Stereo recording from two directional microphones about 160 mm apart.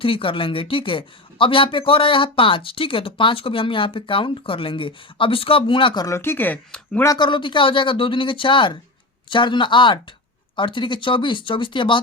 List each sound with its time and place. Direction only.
0.0 s speech: 35° left (ahead or behind); by 7.0 s 5° left (ahead or behind)
7.0 s speech: 25° left (ahead or behind)